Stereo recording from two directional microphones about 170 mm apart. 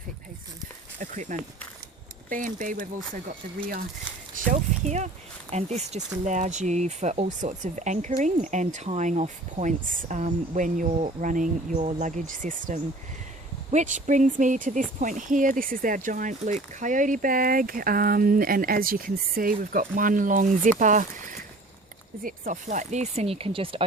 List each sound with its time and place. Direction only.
0.9 s a sound: 45° right (ahead or behind)
2.3 s speech: 50° right (ahead or behind)
4.4 s speech: 45° right (ahead or behind); by 23.8 s 30° right (ahead or behind)